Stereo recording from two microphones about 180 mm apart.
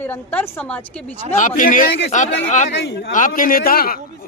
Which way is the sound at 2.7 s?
75° left (ahead or behind).